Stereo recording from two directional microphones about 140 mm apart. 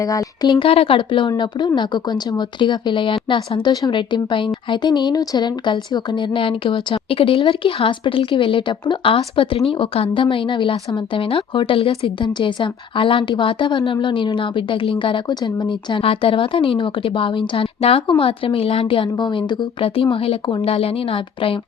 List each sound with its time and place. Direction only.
0.0 s speech: 25° left (ahead or behind)
0.6 s speech: 40° left (ahead or behind)